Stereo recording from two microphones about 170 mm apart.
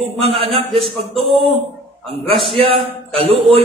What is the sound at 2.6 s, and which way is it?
A man's voice, 35° right (ahead or behind).